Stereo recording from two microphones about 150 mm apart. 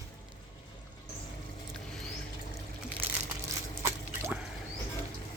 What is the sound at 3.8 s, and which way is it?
Drip, 20° right (ahead or behind).